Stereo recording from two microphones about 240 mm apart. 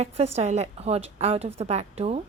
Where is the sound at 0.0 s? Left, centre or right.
Right.